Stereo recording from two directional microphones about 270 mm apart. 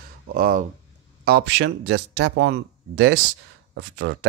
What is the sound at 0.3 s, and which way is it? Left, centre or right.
Speech, right.